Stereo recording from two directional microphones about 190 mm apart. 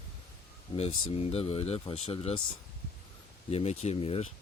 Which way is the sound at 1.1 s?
30° left (ahead or behind).